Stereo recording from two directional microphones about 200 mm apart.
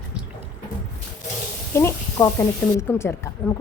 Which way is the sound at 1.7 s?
10° left (ahead or behind).